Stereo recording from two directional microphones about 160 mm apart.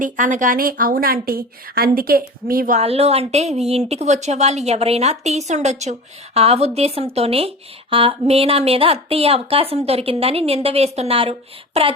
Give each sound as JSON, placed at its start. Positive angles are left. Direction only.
{"t": 0.0, "sound": "speech", "side_deg": -55}
{"t": 2.7, "sound": "a woman's voice", "side_deg": -40}